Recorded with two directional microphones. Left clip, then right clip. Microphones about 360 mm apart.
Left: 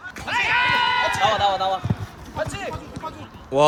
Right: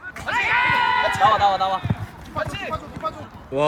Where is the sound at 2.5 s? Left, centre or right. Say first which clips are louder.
Right 1 dB; left.